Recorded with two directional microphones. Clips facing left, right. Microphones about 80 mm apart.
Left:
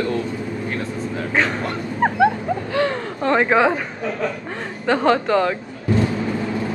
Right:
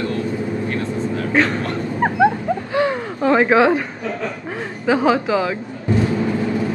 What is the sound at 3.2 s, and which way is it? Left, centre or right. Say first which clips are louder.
Speech: right 3 dB; centre.